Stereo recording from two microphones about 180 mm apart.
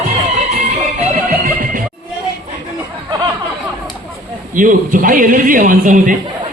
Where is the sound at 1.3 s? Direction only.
50° right (ahead or behind).